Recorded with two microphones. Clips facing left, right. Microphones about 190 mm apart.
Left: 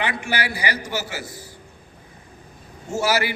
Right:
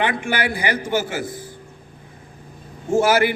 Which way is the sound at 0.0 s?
50° right (ahead or behind).